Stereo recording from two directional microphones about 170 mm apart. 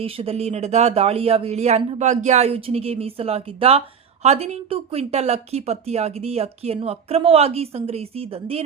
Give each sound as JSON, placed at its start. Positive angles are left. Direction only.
{"t": 0.0, "sound": "speech", "side_deg": -35}